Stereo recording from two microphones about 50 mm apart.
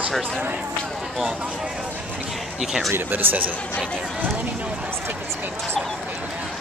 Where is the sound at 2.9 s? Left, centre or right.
Right.